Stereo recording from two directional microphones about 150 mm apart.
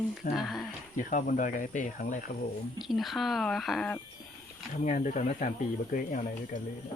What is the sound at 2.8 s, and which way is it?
Speech, centre (ahead or behind).